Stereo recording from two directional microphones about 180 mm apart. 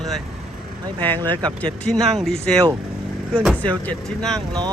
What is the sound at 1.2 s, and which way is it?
Speech, 20° right (ahead or behind).